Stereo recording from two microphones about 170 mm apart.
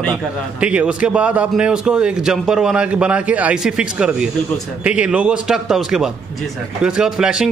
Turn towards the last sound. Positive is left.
turn(degrees=-5)  # may be behind; listen again after turning